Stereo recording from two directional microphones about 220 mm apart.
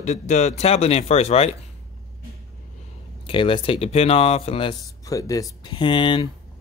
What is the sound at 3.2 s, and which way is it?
Speech, 25° left (ahead or behind).